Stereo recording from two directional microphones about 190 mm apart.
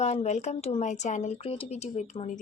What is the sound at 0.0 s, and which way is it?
Speech, 35° left (ahead or behind).